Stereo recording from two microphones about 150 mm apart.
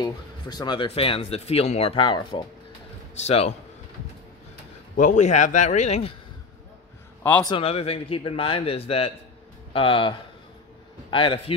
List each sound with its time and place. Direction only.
0.0 s speech: 30° left (ahead or behind)
3.2 s a man's voice: 45° left (ahead or behind)
4.9 s a man's voice: 55° left (ahead or behind)
7.4 s a man's voice: 40° left (ahead or behind)